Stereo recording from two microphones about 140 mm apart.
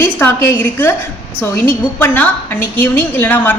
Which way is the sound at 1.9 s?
10° left (ahead or behind).